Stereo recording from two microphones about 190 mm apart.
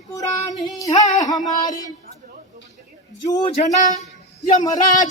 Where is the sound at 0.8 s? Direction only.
20° left (ahead or behind).